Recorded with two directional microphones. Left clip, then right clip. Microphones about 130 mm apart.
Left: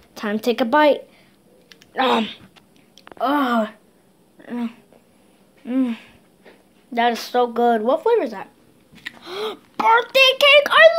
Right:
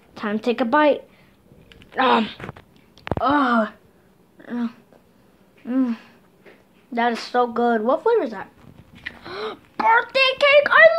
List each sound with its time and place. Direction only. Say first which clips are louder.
0.1 s speech: left 2 dB; 20° left (ahead or behind)
4.4 s a sound: even; 15° left (ahead or behind)
5.7 s a child's voice: even; 15° left (ahead or behind)